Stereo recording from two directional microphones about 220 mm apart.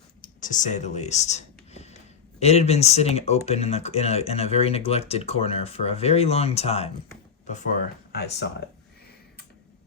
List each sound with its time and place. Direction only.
0.2 s clicking: 35° left (ahead or behind)
2.4 s speech: 30° left (ahead or behind)
8.1 s speech: 45° left (ahead or behind)